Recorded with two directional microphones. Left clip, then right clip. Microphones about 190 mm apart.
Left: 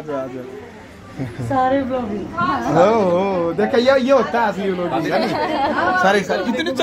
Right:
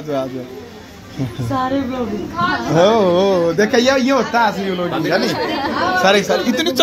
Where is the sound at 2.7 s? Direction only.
15° right (ahead or behind).